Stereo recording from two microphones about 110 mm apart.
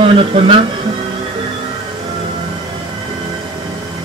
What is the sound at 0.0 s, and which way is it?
Speech, 55° right (ahead or behind).